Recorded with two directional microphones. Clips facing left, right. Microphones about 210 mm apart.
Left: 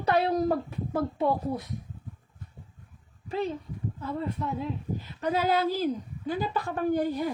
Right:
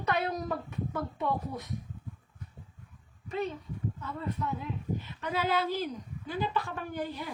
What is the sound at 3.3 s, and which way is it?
A woman's voice, 30° left (ahead or behind).